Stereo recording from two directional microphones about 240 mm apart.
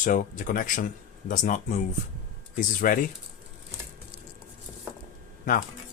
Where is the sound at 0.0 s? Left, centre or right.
Left.